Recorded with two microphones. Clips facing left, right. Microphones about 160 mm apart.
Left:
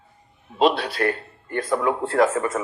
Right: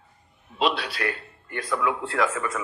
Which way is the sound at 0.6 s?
45° left (ahead or behind).